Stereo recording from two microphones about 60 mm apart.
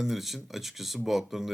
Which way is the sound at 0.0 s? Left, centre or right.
Centre.